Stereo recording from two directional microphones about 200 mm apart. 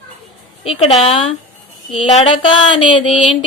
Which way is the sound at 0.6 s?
30° left (ahead or behind).